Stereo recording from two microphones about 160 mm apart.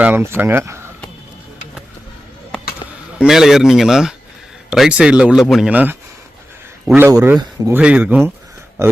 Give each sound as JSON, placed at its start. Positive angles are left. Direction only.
{"t": 0.0, "sound": "speech", "side_deg": -15}
{"t": 3.2, "sound": "speech", "side_deg": 0}